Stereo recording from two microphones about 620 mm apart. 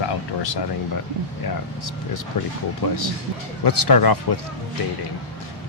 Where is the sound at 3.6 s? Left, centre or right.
Left.